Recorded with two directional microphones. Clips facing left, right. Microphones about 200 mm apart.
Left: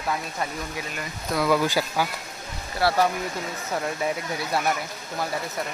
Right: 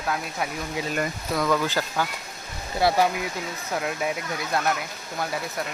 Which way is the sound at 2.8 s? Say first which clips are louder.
Right 1 dB; 20° right (ahead or behind).